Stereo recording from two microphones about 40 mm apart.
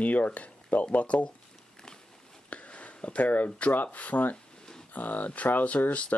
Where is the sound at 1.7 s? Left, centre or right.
Centre.